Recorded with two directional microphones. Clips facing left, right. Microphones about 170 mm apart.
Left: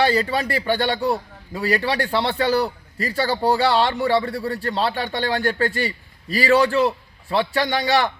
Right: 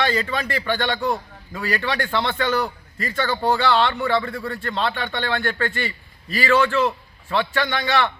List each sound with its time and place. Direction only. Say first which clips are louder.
0.0 s a man's voice: left 3 dB; 35° left (ahead or behind)